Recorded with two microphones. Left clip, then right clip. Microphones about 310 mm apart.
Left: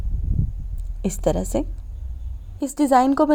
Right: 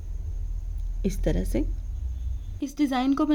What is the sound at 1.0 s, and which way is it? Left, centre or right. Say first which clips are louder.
A woman's voice: left 7 dB; centre.